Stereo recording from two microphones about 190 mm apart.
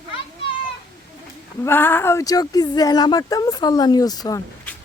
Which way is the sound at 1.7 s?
10° left (ahead or behind).